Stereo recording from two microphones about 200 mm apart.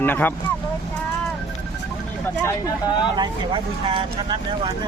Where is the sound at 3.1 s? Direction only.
25° right (ahead or behind).